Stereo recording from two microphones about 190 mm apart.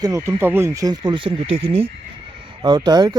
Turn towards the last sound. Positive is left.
turn(degrees=-20)  # may be behind; listen again after turning